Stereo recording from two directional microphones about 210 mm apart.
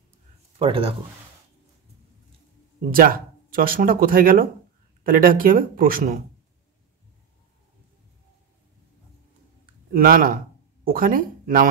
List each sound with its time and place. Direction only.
0.6 s speech: 25° right (ahead or behind)
2.8 s speech: 40° right (ahead or behind)
9.9 s speech: 40° right (ahead or behind)